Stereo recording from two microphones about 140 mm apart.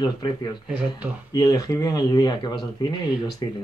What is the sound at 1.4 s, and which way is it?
Speech, 25° left (ahead or behind).